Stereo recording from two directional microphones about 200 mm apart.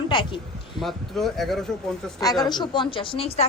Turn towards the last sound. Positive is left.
turn(degrees=25)  # may be behind; listen again after turning